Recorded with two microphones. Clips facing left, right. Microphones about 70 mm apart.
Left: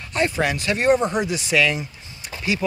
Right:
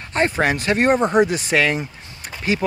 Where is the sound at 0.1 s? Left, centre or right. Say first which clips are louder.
Right 3 dB; right.